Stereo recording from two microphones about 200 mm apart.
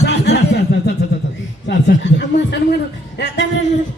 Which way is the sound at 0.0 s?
55° left (ahead or behind).